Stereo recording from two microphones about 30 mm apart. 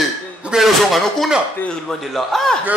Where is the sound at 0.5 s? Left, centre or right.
Right.